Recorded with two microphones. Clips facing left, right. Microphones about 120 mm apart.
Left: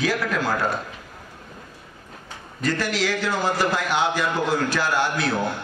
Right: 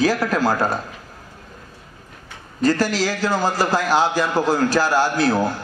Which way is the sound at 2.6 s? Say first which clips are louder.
Right 5 dB; 35° right (ahead or behind).